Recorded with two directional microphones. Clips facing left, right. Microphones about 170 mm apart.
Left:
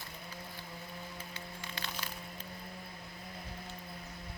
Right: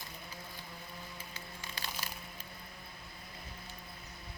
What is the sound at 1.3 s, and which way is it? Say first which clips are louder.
Music: left 2 dB; 40° right (ahead or behind).